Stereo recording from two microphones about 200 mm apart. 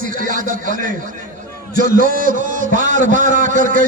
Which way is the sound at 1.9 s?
45° right (ahead or behind).